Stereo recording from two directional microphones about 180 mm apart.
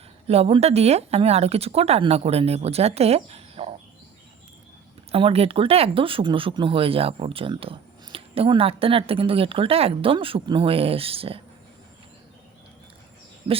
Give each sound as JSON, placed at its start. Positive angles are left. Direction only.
{"t": 0.3, "sound": "speech", "side_deg": -35}
{"t": 5.1, "sound": "speech", "side_deg": -35}
{"t": 13.5, "sound": "speech", "side_deg": -30}